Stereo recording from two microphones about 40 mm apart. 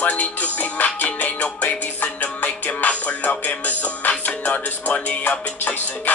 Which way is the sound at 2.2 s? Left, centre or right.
Left.